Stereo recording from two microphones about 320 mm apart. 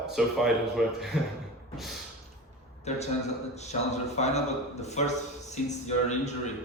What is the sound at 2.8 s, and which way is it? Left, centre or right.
A man's voice, left.